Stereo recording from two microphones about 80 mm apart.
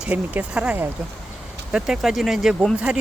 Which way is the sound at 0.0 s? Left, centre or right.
Centre.